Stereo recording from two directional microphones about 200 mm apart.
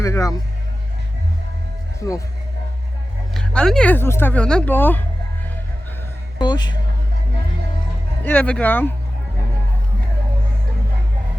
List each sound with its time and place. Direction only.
0.0 s speech: 15° left (ahead or behind)
2.0 s speech: 15° left (ahead or behind)
3.3 s speech: 5° left (ahead or behind)
6.4 s speech: 20° left (ahead or behind)
8.2 s speech: 5° left (ahead or behind)